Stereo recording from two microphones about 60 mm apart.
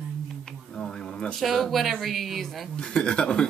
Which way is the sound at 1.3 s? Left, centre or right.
Centre.